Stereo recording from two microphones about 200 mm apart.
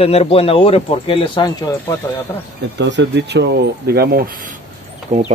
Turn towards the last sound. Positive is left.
turn(degrees=-40)  # may be behind; listen again after turning